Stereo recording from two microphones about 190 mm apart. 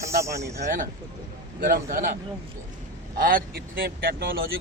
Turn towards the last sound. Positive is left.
turn(degrees=-50)  # may be behind; listen again after turning